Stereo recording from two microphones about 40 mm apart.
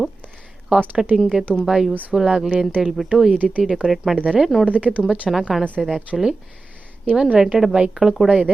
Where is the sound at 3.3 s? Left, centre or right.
Right.